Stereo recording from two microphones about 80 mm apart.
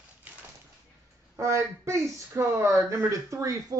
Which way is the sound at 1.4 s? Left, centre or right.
Right.